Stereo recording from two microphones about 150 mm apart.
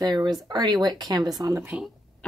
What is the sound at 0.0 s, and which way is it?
Speech, 25° right (ahead or behind).